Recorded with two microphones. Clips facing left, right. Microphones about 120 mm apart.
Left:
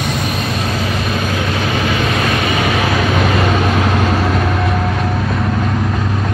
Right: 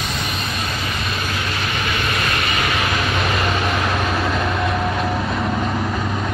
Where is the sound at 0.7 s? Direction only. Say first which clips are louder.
Left 7 dB; 85° left.